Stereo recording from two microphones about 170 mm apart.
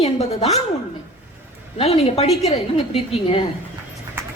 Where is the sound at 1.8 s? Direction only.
35° left (ahead or behind).